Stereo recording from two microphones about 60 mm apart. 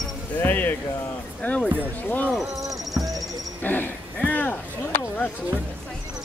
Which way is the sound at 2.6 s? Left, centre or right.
Right.